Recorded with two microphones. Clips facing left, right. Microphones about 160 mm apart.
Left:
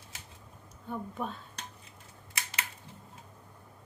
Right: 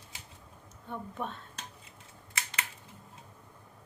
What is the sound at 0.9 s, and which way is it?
Speech, centre (ahead or behind).